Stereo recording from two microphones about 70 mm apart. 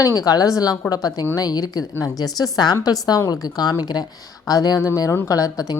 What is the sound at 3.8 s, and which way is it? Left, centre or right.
Speech, left.